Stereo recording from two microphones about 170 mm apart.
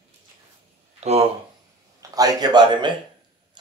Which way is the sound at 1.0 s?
40° right (ahead or behind).